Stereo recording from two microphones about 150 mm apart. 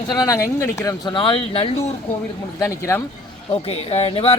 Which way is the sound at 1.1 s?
35° left (ahead or behind).